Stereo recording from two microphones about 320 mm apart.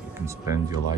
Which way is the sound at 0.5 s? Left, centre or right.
Centre.